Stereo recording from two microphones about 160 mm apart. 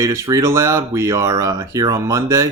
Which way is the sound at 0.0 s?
20° right (ahead or behind).